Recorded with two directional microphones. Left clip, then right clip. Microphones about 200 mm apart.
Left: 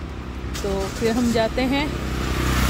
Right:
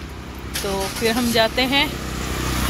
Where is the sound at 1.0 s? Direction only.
Centre (ahead or behind).